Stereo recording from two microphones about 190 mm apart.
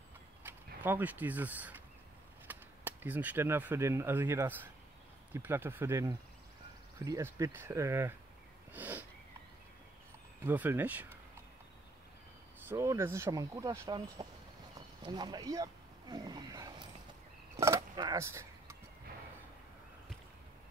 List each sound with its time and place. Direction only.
0.4 s speech: 10° right (ahead or behind)
8.7 s sniff: 10° right (ahead or behind)
10.4 s speech: 10° right (ahead or behind)
12.6 s speech: 15° right (ahead or behind)
17.6 s a sound: 15° right (ahead or behind)